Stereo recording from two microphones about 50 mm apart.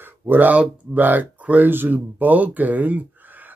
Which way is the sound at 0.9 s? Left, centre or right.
Right.